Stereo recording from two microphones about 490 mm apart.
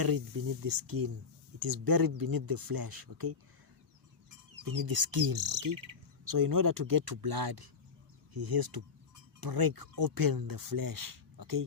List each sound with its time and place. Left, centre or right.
0.0 s speech: right
4.6 s speech: right